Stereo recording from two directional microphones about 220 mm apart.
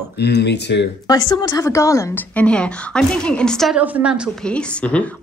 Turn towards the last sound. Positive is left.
turn(degrees=5)  # may be behind; listen again after turning